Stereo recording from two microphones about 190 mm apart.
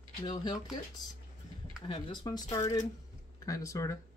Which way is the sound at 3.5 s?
15° left (ahead or behind).